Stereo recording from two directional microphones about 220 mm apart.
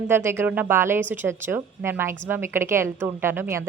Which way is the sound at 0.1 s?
10° right (ahead or behind).